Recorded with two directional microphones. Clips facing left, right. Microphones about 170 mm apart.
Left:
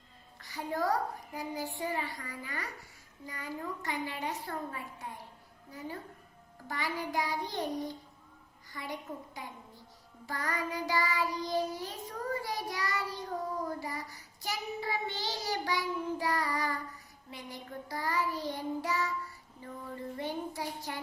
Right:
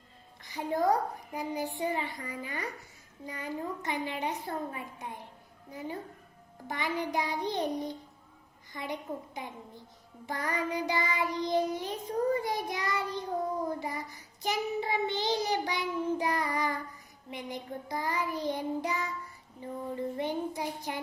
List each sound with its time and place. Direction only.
0.4 s child singing: 20° right (ahead or behind)
6.7 s child singing: 20° right (ahead or behind)